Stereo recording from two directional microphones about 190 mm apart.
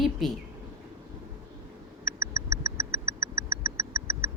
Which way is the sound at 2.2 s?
15° right (ahead or behind).